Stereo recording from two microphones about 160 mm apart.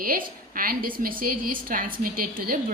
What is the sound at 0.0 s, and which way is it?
A woman's voice, 60° right (ahead or behind).